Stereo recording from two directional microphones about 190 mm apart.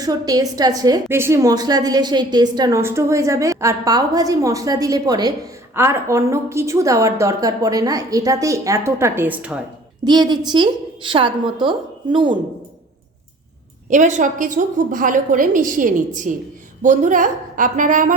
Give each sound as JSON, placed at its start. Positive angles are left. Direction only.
{"t": 0.0, "sound": "a woman's voice", "side_deg": -20}
{"t": 10.0, "sound": "a woman's voice", "side_deg": -20}
{"t": 13.9, "sound": "a woman's voice", "side_deg": -40}